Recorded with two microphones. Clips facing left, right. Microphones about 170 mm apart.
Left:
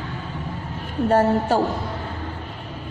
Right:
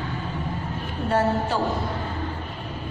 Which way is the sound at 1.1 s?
45° left (ahead or behind).